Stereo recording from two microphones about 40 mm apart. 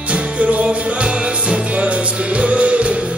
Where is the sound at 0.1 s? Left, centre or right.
Right.